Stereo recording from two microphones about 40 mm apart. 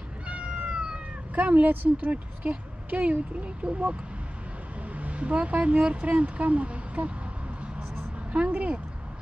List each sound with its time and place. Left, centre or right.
0.3 s cat: right
1.3 s speech: right
2.0 s speech: right
4.9 s speech: right
8.5 s speech: right